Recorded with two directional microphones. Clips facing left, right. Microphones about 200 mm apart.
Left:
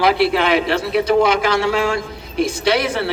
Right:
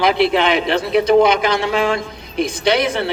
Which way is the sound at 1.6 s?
20° right (ahead or behind).